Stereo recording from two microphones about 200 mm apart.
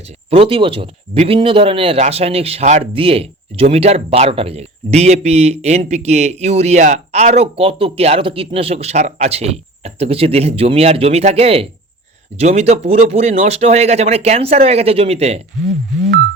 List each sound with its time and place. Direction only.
0.3 s speech: 30° right (ahead or behind)